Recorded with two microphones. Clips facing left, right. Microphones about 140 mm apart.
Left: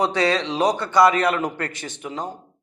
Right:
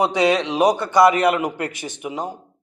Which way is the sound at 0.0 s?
15° right (ahead or behind).